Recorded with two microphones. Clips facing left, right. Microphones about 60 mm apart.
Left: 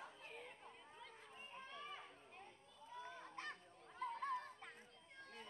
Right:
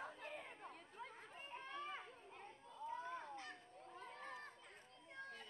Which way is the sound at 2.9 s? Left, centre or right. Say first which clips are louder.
Right 5 dB; right.